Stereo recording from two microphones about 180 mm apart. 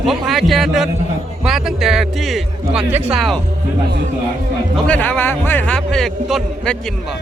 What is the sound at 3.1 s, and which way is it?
Speech, centre (ahead or behind).